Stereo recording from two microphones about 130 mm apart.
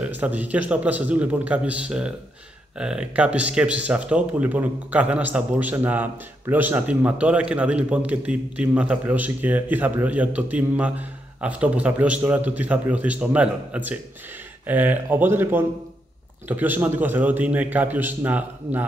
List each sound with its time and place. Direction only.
0.0 s speech: 15° right (ahead or behind)